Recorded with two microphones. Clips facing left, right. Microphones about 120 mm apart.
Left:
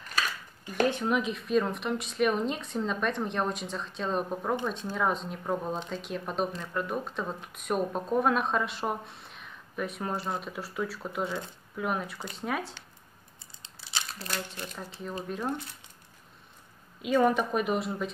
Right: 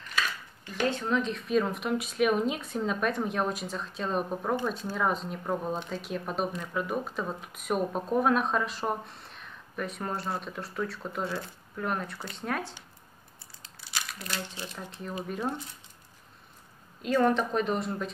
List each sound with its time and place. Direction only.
0.8 s speech: 15° left (ahead or behind)
13.6 s a sound: 25° left (ahead or behind)
14.3 s speech: centre (ahead or behind)
17.0 s speech: 5° left (ahead or behind)